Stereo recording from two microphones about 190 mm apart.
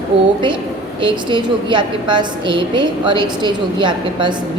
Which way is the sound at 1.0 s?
25° right (ahead or behind).